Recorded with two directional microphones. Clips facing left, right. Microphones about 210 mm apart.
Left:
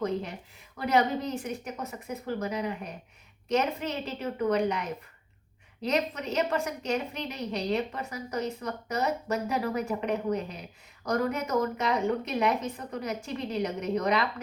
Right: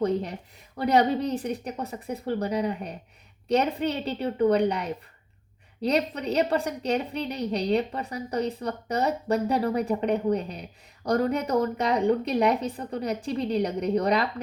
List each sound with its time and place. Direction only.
0.0 s a woman's voice: 35° right (ahead or behind)